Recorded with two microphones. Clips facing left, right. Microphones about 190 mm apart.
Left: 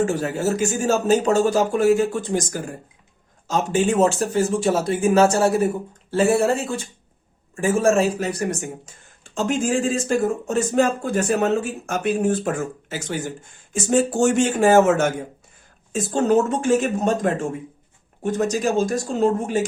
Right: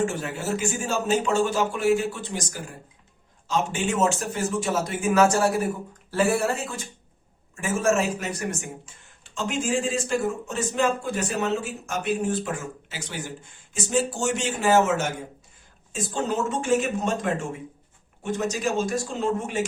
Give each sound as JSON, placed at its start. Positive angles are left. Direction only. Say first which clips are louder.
{"t": 0.0, "sound": "speech", "louder": "left 6 dB", "side_deg": 40}